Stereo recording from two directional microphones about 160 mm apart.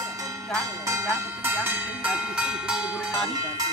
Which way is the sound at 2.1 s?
5° right (ahead or behind).